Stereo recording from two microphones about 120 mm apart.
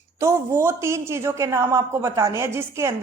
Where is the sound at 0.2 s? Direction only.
25° right (ahead or behind).